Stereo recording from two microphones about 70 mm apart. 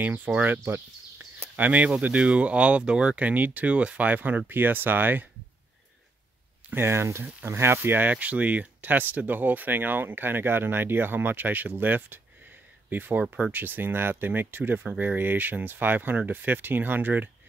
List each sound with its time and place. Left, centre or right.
0.0 s speech: right
6.7 s speech: right